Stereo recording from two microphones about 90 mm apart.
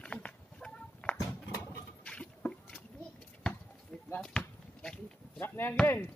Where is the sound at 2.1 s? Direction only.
10° left (ahead or behind).